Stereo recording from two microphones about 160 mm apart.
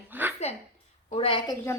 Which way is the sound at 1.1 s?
35° left (ahead or behind).